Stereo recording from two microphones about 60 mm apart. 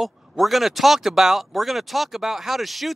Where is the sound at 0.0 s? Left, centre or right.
Centre.